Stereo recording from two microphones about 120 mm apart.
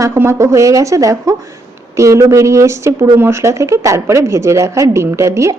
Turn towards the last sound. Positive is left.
turn(degrees=-25)  # may be behind; listen again after turning